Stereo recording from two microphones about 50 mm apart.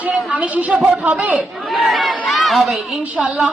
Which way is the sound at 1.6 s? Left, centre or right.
Centre.